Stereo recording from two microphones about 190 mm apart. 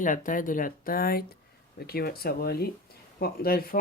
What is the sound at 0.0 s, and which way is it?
Speech, 45° left (ahead or behind).